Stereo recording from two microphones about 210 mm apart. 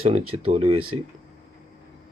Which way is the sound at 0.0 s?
30° right (ahead or behind).